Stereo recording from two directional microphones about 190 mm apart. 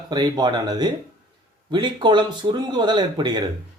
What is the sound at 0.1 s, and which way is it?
Speech, 20° right (ahead or behind).